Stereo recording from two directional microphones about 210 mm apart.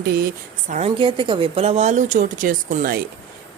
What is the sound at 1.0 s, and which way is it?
Speech, 25° right (ahead or behind).